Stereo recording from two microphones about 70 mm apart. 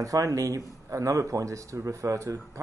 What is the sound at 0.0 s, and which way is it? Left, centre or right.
Speech, right.